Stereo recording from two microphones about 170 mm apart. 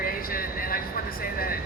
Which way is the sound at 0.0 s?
60° left (ahead or behind).